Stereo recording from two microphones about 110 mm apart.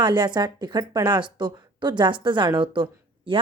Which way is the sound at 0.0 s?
45° right (ahead or behind).